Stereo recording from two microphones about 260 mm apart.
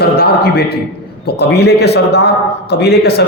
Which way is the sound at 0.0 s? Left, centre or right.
Left.